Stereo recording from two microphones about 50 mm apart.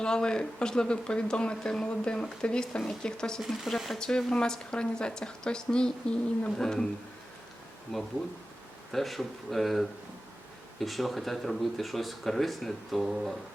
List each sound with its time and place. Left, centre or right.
0.0 s speech: centre
3.4 s speech: centre
8.9 s speech: centre